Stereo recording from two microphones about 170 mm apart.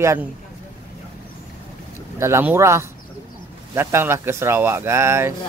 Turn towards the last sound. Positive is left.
turn(degrees=-15)  # may be behind; listen again after turning